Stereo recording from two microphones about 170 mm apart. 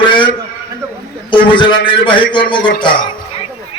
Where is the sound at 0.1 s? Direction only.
30° left (ahead or behind).